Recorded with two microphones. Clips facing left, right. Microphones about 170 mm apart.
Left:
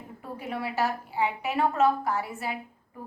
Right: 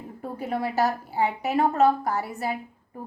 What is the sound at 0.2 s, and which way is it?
A woman's voice, 40° right (ahead or behind).